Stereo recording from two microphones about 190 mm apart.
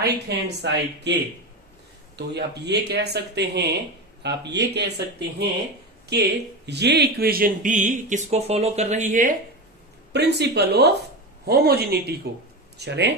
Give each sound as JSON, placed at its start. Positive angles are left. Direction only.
{"t": 0.0, "sound": "speech", "side_deg": -65}
{"t": 2.1, "sound": "speech", "side_deg": -60}
{"t": 6.0, "sound": "speech", "side_deg": -60}
{"t": 10.1, "sound": "speech", "side_deg": -60}